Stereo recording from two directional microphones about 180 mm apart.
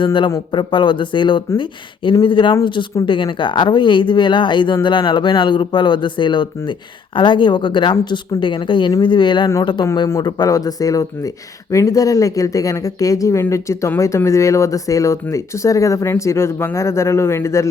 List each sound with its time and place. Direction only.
0.0 s speech: 25° left (ahead or behind)